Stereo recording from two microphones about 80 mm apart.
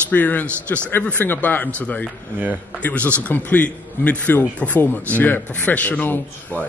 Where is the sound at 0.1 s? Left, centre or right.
Left.